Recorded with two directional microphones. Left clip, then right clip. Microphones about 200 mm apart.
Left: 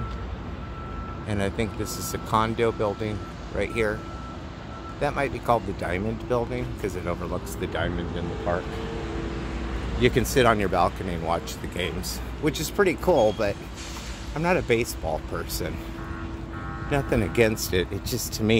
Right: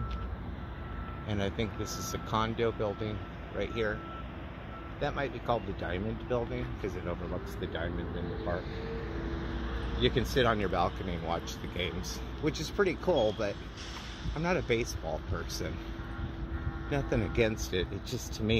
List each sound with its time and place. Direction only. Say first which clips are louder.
1.3 s speech: left 6 dB; 5° left (ahead or behind)
5.0 s speech: left 8 dB; 10° left (ahead or behind)
10.0 s speech: left 8 dB; 15° left (ahead or behind)
16.9 s speech: left 8 dB; 10° left (ahead or behind)